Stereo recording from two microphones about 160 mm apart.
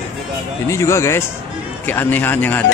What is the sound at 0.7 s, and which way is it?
A man's voice, 15° left (ahead or behind).